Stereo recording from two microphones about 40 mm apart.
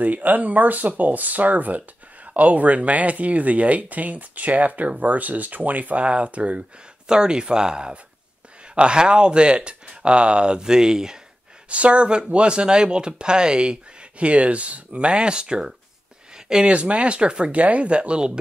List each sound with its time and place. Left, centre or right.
0.0 s speech: right
6.0 s speech: right
7.1 s speech: centre
11.7 s speech: right
16.3 s a sound: centre
16.6 s speech: right
17.6 s speech: right